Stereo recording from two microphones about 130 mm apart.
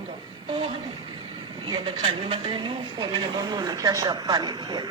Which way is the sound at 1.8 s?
45° right (ahead or behind).